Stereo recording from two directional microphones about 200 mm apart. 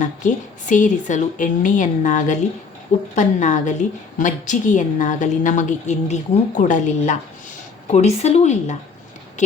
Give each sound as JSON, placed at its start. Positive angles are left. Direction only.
{"t": 0.0, "sound": "a woman's voice", "side_deg": 40}